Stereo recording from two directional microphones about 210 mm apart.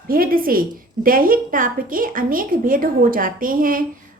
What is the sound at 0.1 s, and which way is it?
A woman's voice, 45° right (ahead or behind).